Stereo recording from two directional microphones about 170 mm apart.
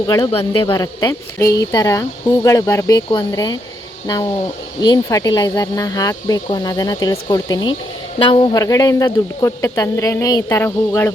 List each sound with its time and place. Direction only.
0.3 s speech: 35° left (ahead or behind); by 11.1 s 15° left (ahead or behind)